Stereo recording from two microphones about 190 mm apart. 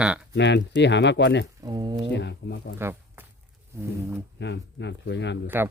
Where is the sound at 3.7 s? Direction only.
15° right (ahead or behind).